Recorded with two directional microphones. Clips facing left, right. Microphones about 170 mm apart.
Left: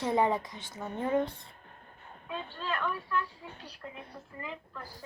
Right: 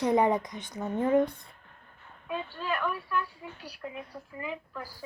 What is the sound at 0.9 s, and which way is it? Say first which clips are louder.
Speech: right 5 dB; 45° right (ahead or behind).